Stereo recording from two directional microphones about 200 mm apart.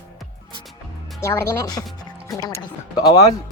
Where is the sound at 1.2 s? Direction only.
15° left (ahead or behind).